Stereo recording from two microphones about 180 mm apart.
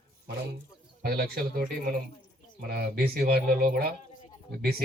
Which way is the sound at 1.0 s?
60° right (ahead or behind).